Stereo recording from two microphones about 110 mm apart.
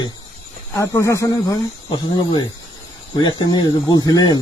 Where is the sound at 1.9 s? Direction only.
45° left (ahead or behind).